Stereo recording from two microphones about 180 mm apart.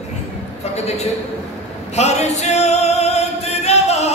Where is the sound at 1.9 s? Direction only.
40° left (ahead or behind).